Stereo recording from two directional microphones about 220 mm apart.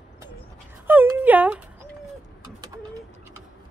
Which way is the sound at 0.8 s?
10° right (ahead or behind).